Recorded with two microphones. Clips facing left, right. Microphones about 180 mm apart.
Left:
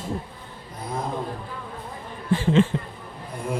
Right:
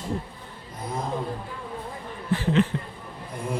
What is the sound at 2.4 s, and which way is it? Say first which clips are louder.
Speech: left 3 dB; 25° left (ahead or behind).